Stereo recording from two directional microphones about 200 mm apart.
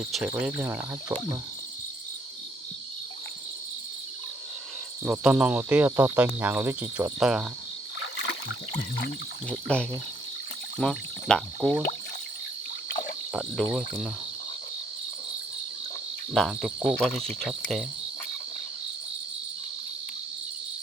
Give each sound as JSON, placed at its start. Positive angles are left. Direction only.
{"t": 0.1, "sound": "speech", "side_deg": -5}
{"t": 5.0, "sound": "speech", "side_deg": -5}
{"t": 7.9, "sound": "rowboat", "side_deg": 65}
{"t": 9.5, "sound": "speech", "side_deg": 5}
{"t": 13.3, "sound": "speech", "side_deg": 0}
{"t": 16.3, "sound": "speech", "side_deg": 0}